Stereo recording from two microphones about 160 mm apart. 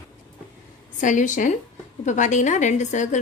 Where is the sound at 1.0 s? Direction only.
50° left (ahead or behind).